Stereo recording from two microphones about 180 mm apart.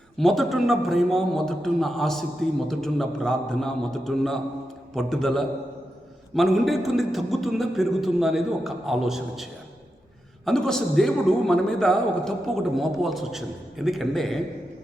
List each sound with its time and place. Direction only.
0.2 s a man's voice: centre (ahead or behind)